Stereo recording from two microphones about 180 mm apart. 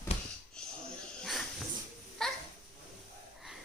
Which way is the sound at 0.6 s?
5° left (ahead or behind).